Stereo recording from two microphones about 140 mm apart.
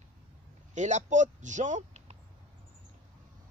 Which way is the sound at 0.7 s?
60° right (ahead or behind).